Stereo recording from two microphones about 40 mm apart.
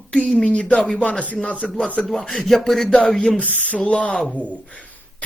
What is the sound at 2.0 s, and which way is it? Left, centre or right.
Speech, centre.